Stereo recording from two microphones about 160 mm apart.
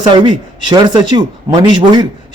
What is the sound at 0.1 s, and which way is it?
Speech, 30° right (ahead or behind).